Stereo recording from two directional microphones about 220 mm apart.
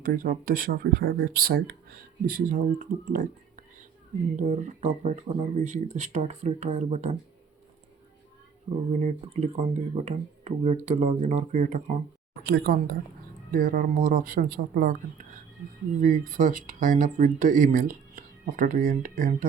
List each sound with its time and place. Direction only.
0.0 s speech: 40° right (ahead or behind)
4.4 s speech: 35° right (ahead or behind)
9.0 s speech: 30° right (ahead or behind)
12.3 s speech: 45° right (ahead or behind)